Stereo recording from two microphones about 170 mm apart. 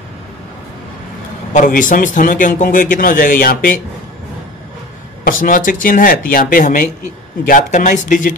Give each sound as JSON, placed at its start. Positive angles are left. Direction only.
{"t": 1.5, "sound": "a man's voice", "side_deg": 50}
{"t": 5.2, "sound": "a man's voice", "side_deg": 50}